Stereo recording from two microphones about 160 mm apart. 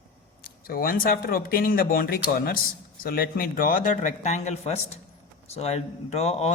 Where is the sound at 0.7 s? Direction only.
65° left (ahead or behind).